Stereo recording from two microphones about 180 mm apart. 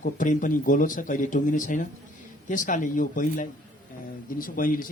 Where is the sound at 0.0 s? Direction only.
45° left (ahead or behind).